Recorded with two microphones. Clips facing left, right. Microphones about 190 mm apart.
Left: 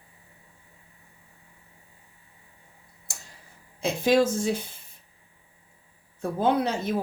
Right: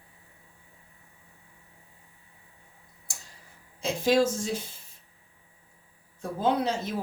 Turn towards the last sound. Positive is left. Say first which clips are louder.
# left 2 dB
turn(degrees=60)  # may be behind; listen again after turning